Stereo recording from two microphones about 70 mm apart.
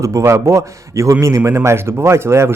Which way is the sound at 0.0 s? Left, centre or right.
Right.